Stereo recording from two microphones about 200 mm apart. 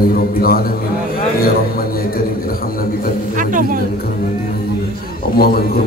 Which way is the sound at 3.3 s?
40° right (ahead or behind).